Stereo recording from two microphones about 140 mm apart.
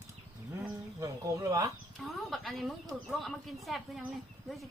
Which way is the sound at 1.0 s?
25° right (ahead or behind).